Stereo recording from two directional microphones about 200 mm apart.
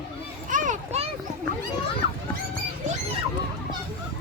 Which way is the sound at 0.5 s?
40° right (ahead or behind).